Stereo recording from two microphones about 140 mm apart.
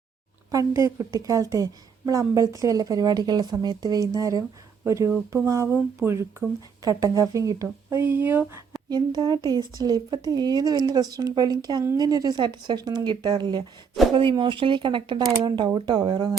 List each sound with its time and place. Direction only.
0.5 s a woman's voice: 25° right (ahead or behind)
8.9 s a woman's voice: 30° right (ahead or behind)